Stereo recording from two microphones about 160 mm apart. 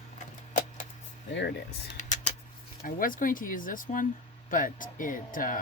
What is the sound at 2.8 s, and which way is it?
Speech, 60° left (ahead or behind).